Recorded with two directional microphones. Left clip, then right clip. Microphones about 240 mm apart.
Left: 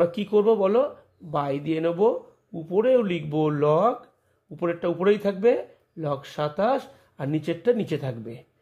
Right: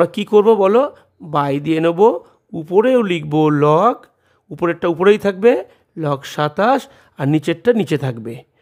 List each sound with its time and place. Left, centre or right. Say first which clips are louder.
0.0 s speech: right 8 dB; right